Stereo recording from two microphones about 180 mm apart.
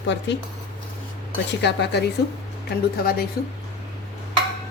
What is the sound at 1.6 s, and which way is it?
A woman's voice, 70° left (ahead or behind).